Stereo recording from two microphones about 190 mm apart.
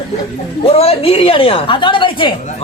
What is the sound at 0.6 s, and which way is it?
A woman's voice, 30° left (ahead or behind).